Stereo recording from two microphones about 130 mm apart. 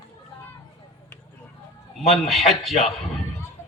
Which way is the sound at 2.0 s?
Centre (ahead or behind).